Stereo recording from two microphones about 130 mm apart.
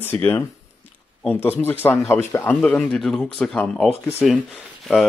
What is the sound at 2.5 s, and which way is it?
Speech, 5° left (ahead or behind).